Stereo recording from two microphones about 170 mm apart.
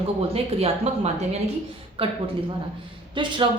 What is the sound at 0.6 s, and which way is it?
A woman's voice, 40° right (ahead or behind).